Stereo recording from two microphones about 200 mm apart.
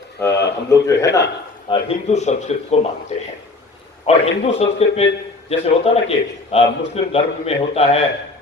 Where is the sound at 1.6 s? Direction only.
30° left (ahead or behind).